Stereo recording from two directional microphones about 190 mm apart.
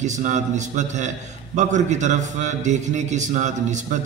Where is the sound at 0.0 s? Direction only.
40° right (ahead or behind).